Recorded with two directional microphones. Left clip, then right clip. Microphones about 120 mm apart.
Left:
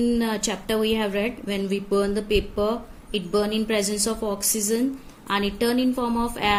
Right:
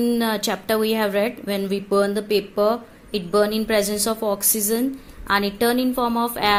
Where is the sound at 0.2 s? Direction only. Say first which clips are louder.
Right 3 dB; 15° right (ahead or behind).